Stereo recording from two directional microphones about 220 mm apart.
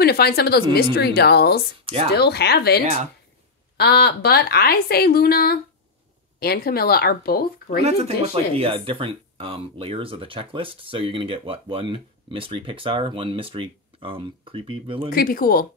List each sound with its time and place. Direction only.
0.0 s a woman's voice: 45° left (ahead or behind)
2.8 s speech: 30° right (ahead or behind)
3.7 s a woman's voice: 45° left (ahead or behind)
7.8 s speech: 30° right (ahead or behind)
15.0 s speech: 40° left (ahead or behind)